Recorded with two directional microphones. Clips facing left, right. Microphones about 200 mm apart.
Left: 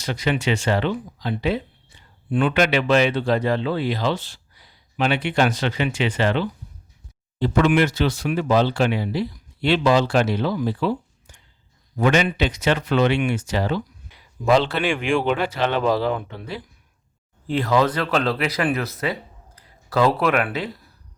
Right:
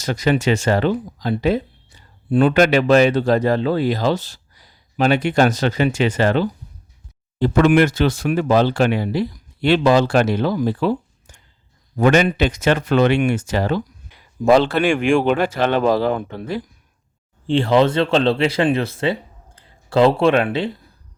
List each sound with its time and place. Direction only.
0.0 s speech: 45° right (ahead or behind)
17.4 s speech: 30° right (ahead or behind)